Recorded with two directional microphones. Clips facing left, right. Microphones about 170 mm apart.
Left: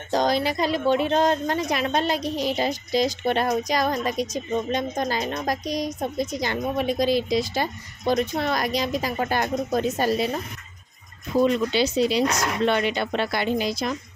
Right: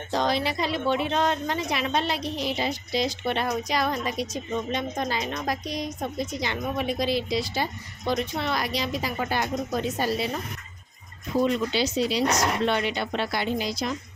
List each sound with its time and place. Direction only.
0.1 s a woman's voice: 40° left (ahead or behind)
11.7 s speech: 55° left (ahead or behind)